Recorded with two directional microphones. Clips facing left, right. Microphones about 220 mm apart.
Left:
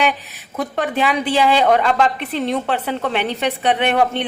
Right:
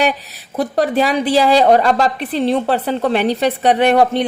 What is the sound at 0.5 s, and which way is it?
A woman's voice, 35° right (ahead or behind).